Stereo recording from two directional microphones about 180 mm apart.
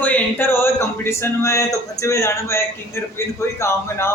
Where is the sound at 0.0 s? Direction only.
10° left (ahead or behind).